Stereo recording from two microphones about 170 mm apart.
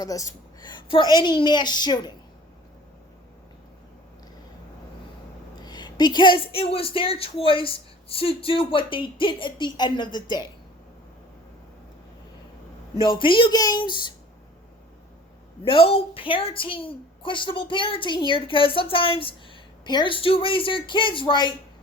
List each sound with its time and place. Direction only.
0.0 s a woman's voice: 20° left (ahead or behind)
5.6 s a woman's voice: 25° left (ahead or behind)
13.0 s a woman's voice: 30° left (ahead or behind)
15.6 s a woman's voice: 30° left (ahead or behind)